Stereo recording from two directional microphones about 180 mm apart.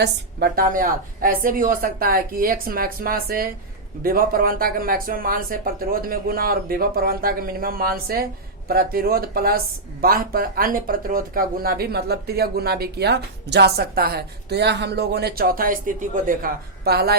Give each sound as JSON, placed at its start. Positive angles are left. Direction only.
{"t": 0.0, "sound": "a woman's voice", "side_deg": -60}